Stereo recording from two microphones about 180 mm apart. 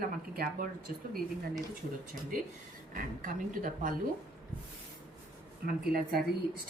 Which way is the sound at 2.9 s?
50° right (ahead or behind).